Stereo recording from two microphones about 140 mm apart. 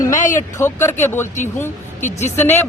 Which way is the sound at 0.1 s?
65° left (ahead or behind).